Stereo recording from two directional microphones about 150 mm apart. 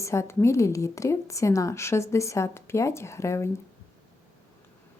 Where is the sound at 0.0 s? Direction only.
20° left (ahead or behind).